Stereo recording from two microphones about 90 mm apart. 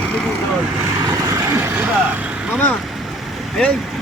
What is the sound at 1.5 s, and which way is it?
Vehicle, 25° right (ahead or behind).